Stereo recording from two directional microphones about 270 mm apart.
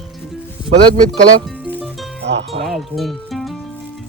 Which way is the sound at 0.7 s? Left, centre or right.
Right.